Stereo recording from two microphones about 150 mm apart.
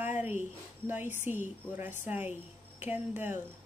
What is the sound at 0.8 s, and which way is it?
Speech, 15° right (ahead or behind).